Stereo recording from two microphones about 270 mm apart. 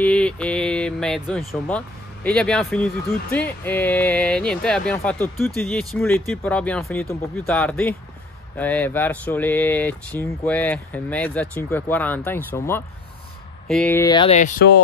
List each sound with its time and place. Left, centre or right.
0.0 s speech: centre; by 14.8 s left